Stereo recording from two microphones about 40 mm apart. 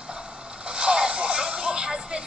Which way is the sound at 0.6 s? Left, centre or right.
Right.